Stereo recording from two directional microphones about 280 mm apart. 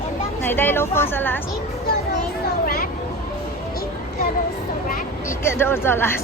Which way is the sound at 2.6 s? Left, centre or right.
Left.